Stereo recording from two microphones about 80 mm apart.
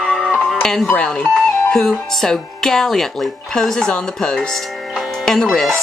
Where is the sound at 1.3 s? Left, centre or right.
Centre.